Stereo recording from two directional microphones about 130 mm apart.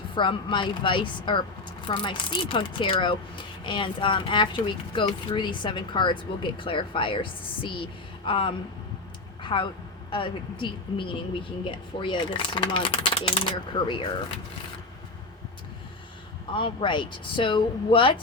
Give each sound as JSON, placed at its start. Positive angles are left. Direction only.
{"t": 0.1, "sound": "speech", "side_deg": 40}
{"t": 9.4, "sound": "a sound", "side_deg": 40}
{"t": 10.1, "sound": "speech", "side_deg": 40}
{"t": 16.5, "sound": "speech", "side_deg": 40}